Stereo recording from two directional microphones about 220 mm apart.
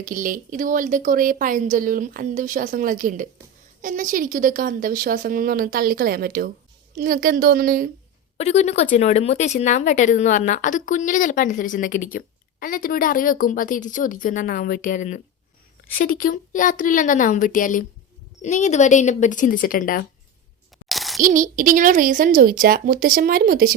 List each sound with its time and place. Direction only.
0.0 s a woman's voice: 35° right (ahead or behind)
8.4 s speech: 30° left (ahead or behind)
20.8 s a sound: centre (ahead or behind)
21.2 s a woman's voice: 35° right (ahead or behind)